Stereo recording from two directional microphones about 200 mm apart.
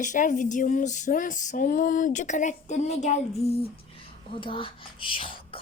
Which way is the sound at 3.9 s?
25° left (ahead or behind).